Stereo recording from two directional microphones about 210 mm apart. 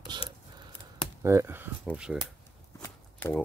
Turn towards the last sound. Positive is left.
turn(degrees=10)  # may be behind; listen again after turning